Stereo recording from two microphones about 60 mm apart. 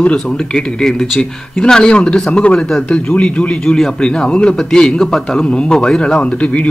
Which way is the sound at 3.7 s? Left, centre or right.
Centre.